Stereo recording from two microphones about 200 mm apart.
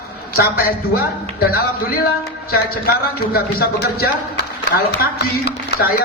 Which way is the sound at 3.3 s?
50° left (ahead or behind).